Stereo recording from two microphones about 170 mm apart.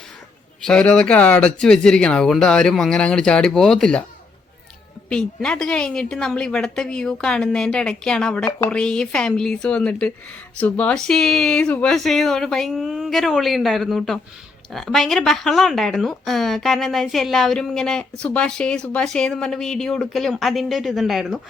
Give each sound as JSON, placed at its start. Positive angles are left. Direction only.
{"t": 0.6, "sound": "speech", "side_deg": 5}
{"t": 5.0, "sound": "speech", "side_deg": 5}